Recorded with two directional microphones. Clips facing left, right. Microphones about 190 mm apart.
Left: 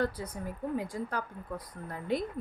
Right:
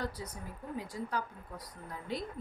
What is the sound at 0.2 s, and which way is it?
Speech, 60° left (ahead or behind).